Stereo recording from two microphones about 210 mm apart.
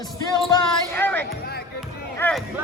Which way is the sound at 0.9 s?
10° left (ahead or behind).